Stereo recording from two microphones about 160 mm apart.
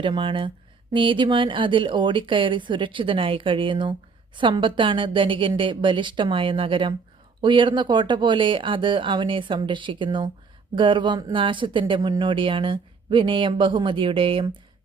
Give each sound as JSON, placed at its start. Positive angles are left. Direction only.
{"t": 0.0, "sound": "speech", "side_deg": -30}